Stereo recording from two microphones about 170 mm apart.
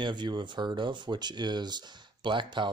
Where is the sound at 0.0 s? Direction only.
25° right (ahead or behind).